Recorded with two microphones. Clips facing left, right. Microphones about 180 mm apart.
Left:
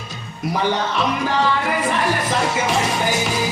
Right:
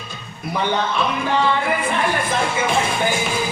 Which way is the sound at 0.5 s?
40° left (ahead or behind).